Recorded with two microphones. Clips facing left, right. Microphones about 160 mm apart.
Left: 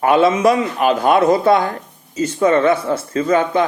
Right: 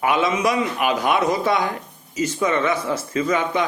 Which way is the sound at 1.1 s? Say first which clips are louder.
Left 7 dB; 55° left (ahead or behind).